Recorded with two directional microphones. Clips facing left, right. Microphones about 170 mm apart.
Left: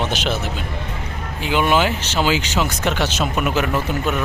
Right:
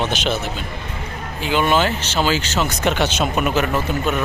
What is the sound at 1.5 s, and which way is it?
Speech, 10° left (ahead or behind).